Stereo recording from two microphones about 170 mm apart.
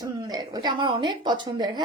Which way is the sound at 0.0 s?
25° right (ahead or behind).